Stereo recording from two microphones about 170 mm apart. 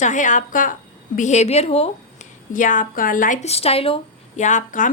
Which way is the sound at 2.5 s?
50° left (ahead or behind).